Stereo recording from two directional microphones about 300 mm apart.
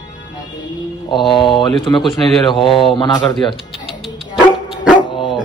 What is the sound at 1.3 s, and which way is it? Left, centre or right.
Speech, centre.